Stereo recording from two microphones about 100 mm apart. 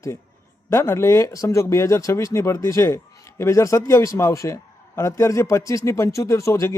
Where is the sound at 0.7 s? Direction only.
25° left (ahead or behind).